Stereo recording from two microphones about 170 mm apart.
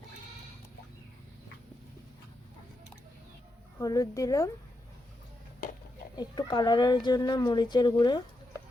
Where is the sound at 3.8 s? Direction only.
20° left (ahead or behind).